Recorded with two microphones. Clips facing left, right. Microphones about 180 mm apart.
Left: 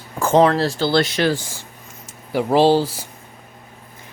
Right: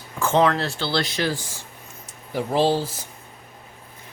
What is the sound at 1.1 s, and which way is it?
Speech, 75° left (ahead or behind).